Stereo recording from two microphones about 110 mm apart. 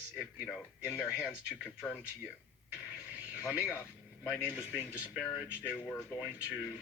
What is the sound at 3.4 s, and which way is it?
Speech, 25° left (ahead or behind).